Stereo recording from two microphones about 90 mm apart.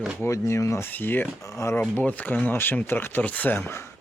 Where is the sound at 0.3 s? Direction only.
35° left (ahead or behind).